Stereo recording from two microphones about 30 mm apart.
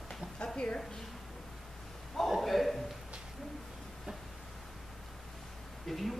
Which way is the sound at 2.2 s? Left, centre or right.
Centre.